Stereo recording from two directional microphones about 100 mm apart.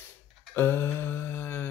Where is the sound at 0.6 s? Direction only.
20° left (ahead or behind).